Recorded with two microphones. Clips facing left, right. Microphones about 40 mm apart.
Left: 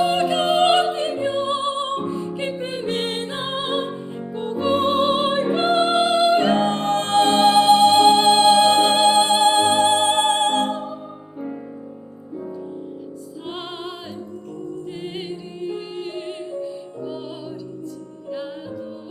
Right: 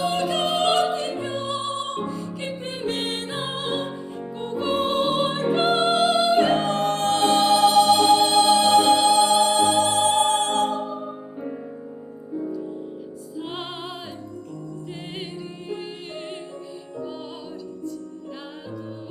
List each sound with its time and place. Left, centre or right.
0.0 s music: centre
0.5 s opera: left
1.1 s music: centre
1.4 s music: left
2.4 s music: centre
4.4 s music: centre; by 5.5 s left
5.5 s music: centre; by 10.8 s left
13.5 s music: centre
16.6 s music: centre